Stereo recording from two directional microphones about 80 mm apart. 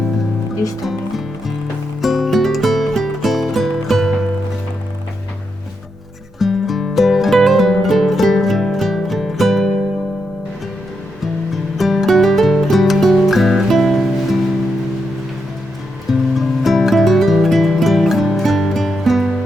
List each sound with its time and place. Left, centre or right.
0.8 s music: centre
6.4 s music: centre
11.5 s music: centre
16.4 s music: centre